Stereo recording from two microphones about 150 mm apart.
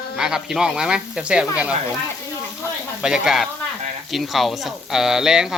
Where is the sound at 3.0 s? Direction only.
5° right (ahead or behind).